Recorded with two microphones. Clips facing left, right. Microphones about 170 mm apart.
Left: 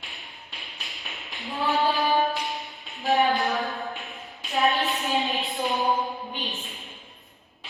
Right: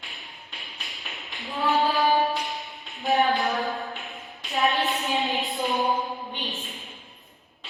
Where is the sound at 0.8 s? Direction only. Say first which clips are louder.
Even; centre (ahead or behind).